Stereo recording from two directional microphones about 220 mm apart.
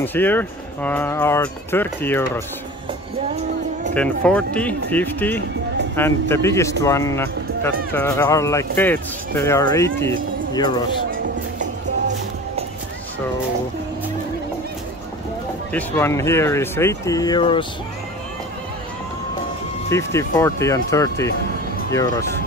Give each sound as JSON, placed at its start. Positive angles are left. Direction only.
{"t": 0.0, "sound": "speech", "side_deg": 10}
{"t": 3.9, "sound": "speech", "side_deg": 5}
{"t": 15.7, "sound": "speech", "side_deg": 10}
{"t": 19.9, "sound": "speech", "side_deg": 15}